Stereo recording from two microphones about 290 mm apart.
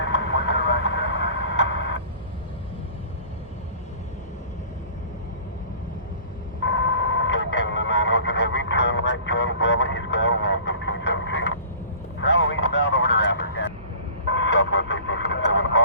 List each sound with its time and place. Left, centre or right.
0.0 s vehicle: left
6.6 s radio: left
12.2 s vehicle: left